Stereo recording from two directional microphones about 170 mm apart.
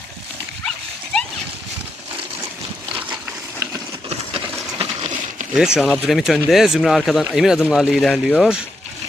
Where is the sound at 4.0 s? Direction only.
35° right (ahead or behind).